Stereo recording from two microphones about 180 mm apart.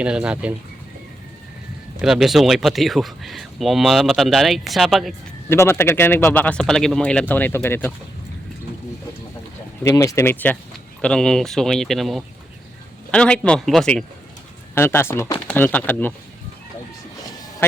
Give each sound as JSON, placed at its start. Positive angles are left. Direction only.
{"t": 0.0, "sound": "speech", "side_deg": -5}
{"t": 2.0, "sound": "speech", "side_deg": 0}
{"t": 5.5, "sound": "speech", "side_deg": 15}
{"t": 9.8, "sound": "speech", "side_deg": 20}
{"t": 14.8, "sound": "speech", "side_deg": 15}
{"t": 17.6, "sound": "a man's voice", "side_deg": 15}